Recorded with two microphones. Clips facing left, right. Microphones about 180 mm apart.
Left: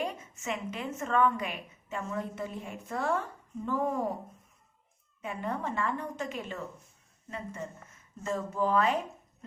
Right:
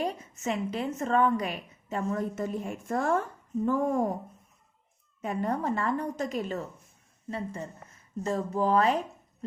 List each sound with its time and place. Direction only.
0.0 s a woman's voice: 35° right (ahead or behind)
5.2 s a woman's voice: 40° right (ahead or behind)
9.4 s a sound: 35° right (ahead or behind)